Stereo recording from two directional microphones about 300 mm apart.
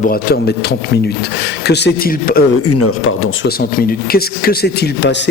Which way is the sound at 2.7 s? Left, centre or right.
Left.